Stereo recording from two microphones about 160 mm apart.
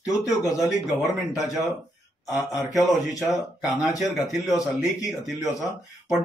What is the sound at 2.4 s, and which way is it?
Speech, 20° left (ahead or behind).